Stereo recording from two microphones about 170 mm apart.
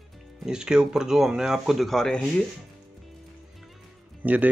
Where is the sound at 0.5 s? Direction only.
5° right (ahead or behind).